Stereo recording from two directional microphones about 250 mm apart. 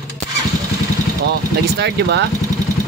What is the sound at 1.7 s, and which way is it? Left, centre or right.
Speech, right.